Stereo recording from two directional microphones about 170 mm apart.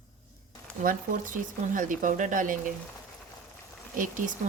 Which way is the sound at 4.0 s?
50° right (ahead or behind).